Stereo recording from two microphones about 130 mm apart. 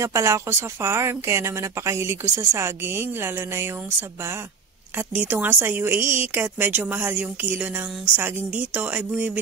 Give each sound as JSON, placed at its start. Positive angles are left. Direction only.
{"t": 0.0, "sound": "speech", "side_deg": -25}
{"t": 4.9, "sound": "a woman's voice", "side_deg": -15}